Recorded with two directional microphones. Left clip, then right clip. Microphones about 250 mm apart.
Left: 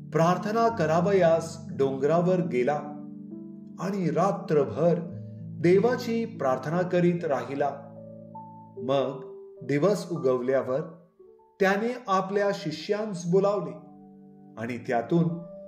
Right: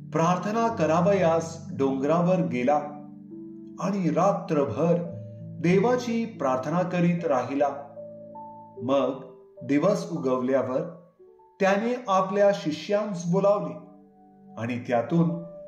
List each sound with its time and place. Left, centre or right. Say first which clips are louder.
0.1 s a man's voice: even; left
8.8 s a man's voice: right 2 dB; left